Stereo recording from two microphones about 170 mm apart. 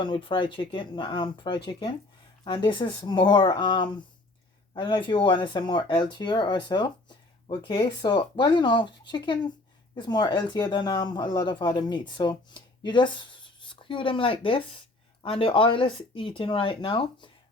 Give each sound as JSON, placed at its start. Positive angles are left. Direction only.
{"t": 0.0, "sound": "speech", "side_deg": 30}